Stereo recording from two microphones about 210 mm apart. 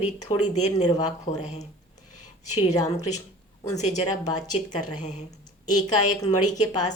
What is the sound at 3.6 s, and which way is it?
A woman's voice, 35° left (ahead or behind).